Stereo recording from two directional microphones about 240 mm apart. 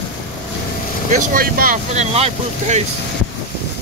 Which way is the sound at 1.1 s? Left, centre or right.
Right.